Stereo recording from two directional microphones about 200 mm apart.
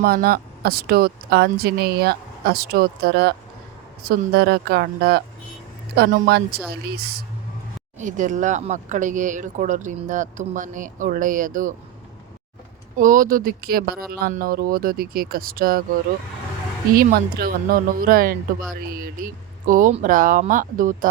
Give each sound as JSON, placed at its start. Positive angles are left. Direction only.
{"t": 0.0, "sound": "speech", "side_deg": -50}
{"t": 7.9, "sound": "speech", "side_deg": -40}
{"t": 13.0, "sound": "speech", "side_deg": -40}
{"t": 16.9, "sound": "speech", "side_deg": -45}